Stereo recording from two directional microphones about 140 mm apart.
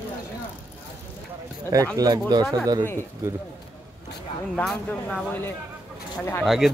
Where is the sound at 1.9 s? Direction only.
25° right (ahead or behind).